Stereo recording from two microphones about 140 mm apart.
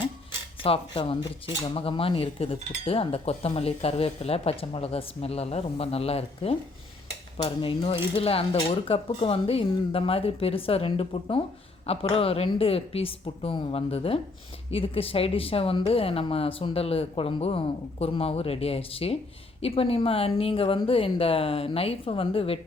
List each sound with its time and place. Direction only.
0.6 s speech: 40° left (ahead or behind)